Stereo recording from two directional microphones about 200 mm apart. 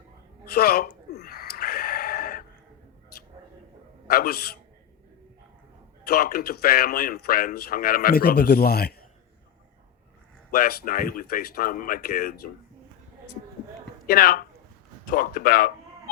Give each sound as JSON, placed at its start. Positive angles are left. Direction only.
{"t": 0.5, "sound": "gasp", "side_deg": 50}
{"t": 4.0, "sound": "a man's voice", "side_deg": 50}
{"t": 6.1, "sound": "a man's voice", "side_deg": 50}
{"t": 10.5, "sound": "a man's voice", "side_deg": 50}
{"t": 14.1, "sound": "a man's voice", "side_deg": 45}